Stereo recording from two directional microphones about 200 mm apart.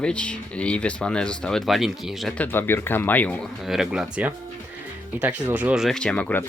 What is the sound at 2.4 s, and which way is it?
Speech, 10° left (ahead or behind).